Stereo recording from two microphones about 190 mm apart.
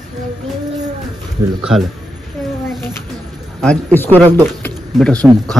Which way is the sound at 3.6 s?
10° left (ahead or behind).